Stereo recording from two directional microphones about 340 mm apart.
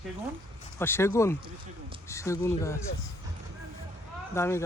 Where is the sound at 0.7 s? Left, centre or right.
Centre.